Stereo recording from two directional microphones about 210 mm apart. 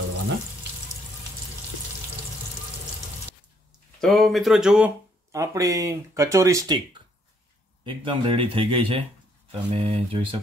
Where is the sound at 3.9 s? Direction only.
Centre (ahead or behind).